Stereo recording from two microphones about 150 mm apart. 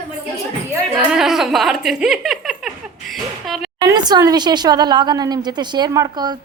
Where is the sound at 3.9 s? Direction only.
25° right (ahead or behind).